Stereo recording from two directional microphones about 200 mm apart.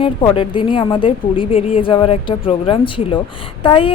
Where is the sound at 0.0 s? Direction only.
25° left (ahead or behind).